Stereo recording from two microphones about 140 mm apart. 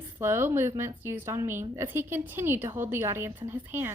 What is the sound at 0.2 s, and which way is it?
A woman's voice, 15° right (ahead or behind).